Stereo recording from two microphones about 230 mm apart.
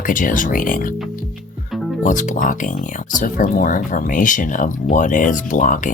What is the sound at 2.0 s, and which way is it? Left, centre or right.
Speech, left.